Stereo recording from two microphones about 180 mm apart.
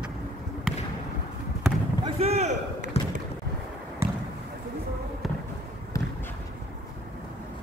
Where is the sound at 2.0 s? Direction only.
35° right (ahead or behind).